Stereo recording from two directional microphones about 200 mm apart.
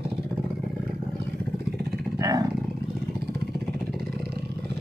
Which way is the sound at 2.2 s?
20° right (ahead or behind).